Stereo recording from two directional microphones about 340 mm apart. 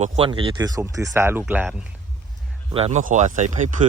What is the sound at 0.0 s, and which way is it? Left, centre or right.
Speech, centre.